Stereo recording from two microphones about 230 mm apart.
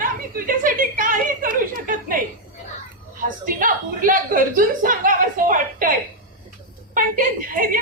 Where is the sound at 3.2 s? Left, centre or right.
Right.